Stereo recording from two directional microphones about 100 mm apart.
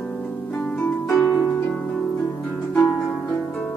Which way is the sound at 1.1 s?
35° left (ahead or behind).